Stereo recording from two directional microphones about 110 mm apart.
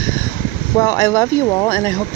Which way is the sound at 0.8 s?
25° left (ahead or behind).